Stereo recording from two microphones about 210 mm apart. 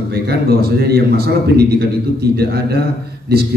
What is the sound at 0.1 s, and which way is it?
A man's voice, 50° right (ahead or behind).